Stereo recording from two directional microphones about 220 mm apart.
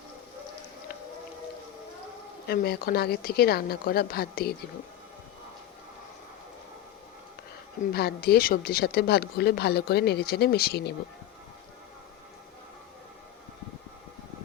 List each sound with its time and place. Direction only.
2.5 s speech: 45° left (ahead or behind)
7.9 s speech: 45° left (ahead or behind)